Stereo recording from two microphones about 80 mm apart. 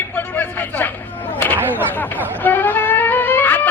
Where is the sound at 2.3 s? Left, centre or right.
Left.